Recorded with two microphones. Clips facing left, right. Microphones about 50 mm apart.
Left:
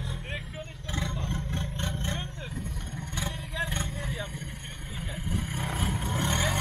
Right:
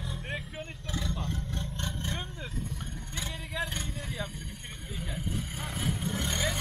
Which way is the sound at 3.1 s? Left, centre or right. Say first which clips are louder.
Left 4 dB; left.